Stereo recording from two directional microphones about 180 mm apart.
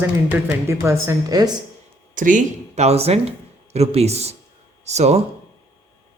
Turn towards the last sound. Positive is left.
turn(degrees=-40)  # may be behind; listen again after turning